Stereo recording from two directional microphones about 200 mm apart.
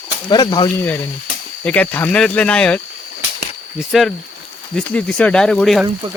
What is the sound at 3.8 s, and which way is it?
Speech, centre (ahead or behind).